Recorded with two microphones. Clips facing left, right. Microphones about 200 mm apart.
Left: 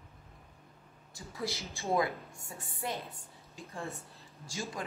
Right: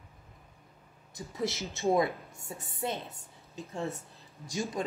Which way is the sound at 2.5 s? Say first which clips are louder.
Right 5 dB; 25° right (ahead or behind).